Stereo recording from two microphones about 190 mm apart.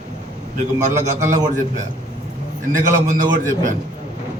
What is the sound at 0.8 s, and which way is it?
Speech, 40° right (ahead or behind).